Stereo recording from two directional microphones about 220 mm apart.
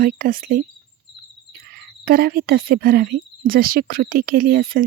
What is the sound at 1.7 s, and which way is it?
Speech, 45° right (ahead or behind).